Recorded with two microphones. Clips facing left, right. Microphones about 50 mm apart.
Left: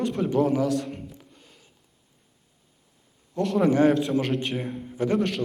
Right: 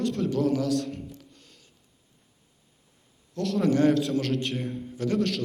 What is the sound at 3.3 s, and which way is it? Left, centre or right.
A man's voice, centre.